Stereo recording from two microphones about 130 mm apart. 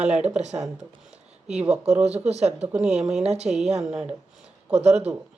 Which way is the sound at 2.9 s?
55° right (ahead or behind).